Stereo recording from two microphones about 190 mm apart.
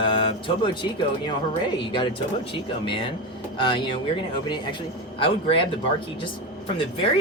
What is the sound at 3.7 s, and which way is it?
Speech, 25° left (ahead or behind).